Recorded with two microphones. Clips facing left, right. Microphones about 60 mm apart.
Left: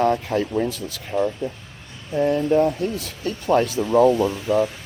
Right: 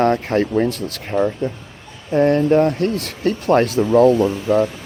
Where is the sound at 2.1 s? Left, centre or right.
Right.